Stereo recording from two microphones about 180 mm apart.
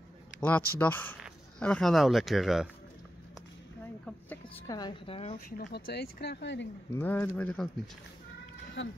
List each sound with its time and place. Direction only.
0.4 s speech: 10° left (ahead or behind)
4.6 s a woman's voice: 25° left (ahead or behind)
5.6 s speech: 65° left (ahead or behind)
7.0 s speech: 10° left (ahead or behind)
8.8 s speech: 80° left